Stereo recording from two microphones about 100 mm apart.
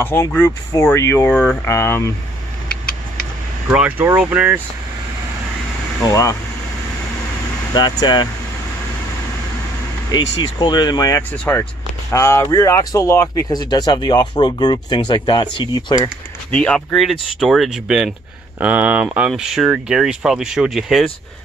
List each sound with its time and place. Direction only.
0.0 s speech: 25° left (ahead or behind)
3.6 s speech: 15° right (ahead or behind)
6.0 s speech: 35° left (ahead or behind)
7.7 s speech: 45° left (ahead or behind)
10.1 s speech: 45° left (ahead or behind)
11.3 s speech: 20° left (ahead or behind)
12.1 s speech: 30° left (ahead or behind)
13.5 s speech: 45° left (ahead or behind)
16.5 s speech: 10° left (ahead or behind)
18.6 s speech: 15° right (ahead or behind)